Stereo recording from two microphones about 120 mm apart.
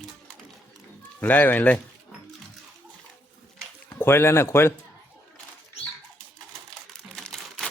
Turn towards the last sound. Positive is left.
turn(degrees=5)  # may be behind; listen again after turning